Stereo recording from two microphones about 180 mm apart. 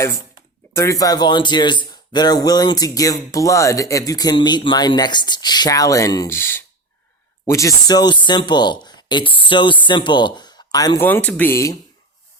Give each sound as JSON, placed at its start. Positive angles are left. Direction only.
{"t": 0.8, "sound": "speech", "side_deg": 20}